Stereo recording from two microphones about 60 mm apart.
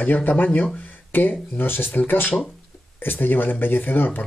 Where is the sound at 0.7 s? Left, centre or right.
Left.